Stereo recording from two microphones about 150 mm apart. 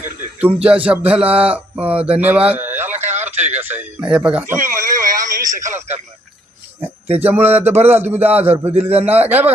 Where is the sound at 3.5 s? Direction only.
10° right (ahead or behind).